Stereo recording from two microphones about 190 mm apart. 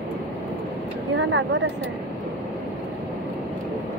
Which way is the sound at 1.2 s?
80° right.